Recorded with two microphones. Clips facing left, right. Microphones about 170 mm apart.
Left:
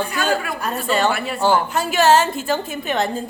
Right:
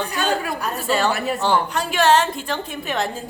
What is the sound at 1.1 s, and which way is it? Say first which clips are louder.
Speech: even; 40° right (ahead or behind).